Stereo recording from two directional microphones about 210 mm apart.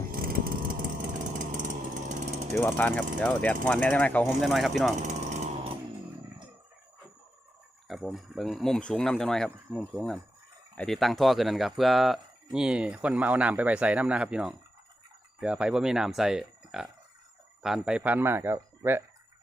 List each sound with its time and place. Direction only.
0.1 s vehicle: 45° right (ahead or behind)
1.5 s power tool: 35° right (ahead or behind)
2.6 s speech: 10° left (ahead or behind)
4.9 s a sound: 35° right (ahead or behind)
7.9 s speech: centre (ahead or behind)